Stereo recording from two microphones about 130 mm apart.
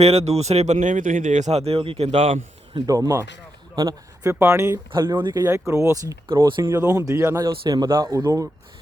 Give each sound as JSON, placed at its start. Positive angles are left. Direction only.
{"t": 0.0, "sound": "speech", "side_deg": -55}
{"t": 2.7, "sound": "speech", "side_deg": -25}
{"t": 4.9, "sound": "speech", "side_deg": -40}
{"t": 5.4, "sound": "speech", "side_deg": -20}